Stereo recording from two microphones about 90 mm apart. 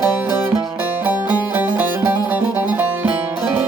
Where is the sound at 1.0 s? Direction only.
20° right (ahead or behind).